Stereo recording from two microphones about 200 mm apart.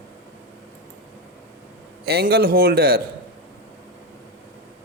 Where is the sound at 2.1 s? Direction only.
50° right (ahead or behind).